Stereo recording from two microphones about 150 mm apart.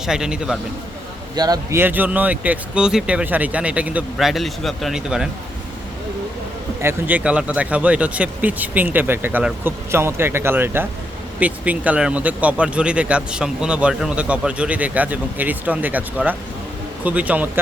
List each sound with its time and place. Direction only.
0.0 s a man's voice: 5° right (ahead or behind)
1.4 s a man's voice: 25° right (ahead or behind)
1.8 s speech: 10° right (ahead or behind)
6.8 s speech: 10° right (ahead or behind)